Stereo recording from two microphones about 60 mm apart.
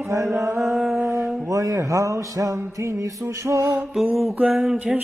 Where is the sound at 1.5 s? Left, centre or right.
Right.